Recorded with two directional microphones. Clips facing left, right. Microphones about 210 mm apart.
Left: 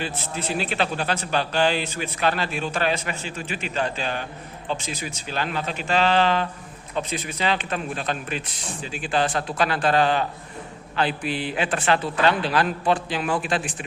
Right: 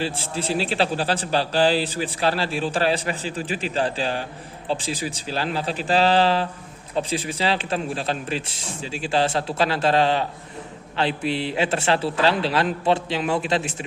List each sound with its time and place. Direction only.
0.0 s a man's voice: 30° right (ahead or behind)